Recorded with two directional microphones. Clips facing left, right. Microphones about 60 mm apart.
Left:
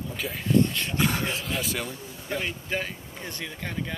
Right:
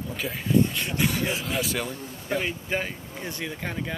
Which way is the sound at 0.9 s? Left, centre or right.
Left.